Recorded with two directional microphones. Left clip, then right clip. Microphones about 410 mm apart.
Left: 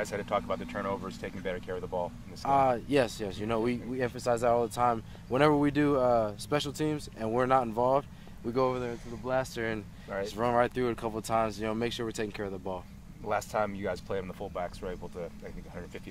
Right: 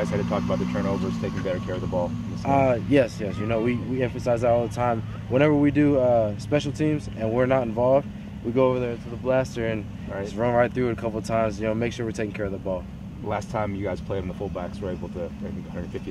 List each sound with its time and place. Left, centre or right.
0.0 s speech: centre
2.4 s speech: centre
13.3 s speech: centre